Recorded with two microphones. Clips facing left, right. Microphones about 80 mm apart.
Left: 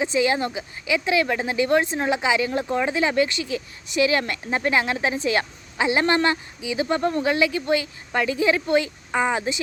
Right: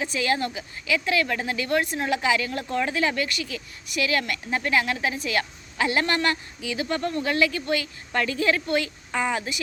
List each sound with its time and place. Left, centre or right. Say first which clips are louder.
0.0 s speech: left 4 dB; centre